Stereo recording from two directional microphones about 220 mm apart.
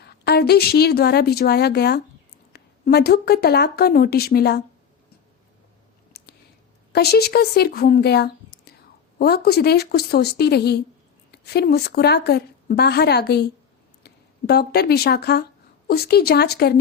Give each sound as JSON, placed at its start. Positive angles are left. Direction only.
{"t": 0.0, "sound": "a woman's voice", "side_deg": 45}
{"t": 6.1, "sound": "clicking", "side_deg": 45}
{"t": 6.9, "sound": "a woman's voice", "side_deg": 45}